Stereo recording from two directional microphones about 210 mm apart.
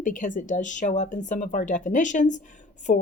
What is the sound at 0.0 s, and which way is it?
Speech, 40° left (ahead or behind).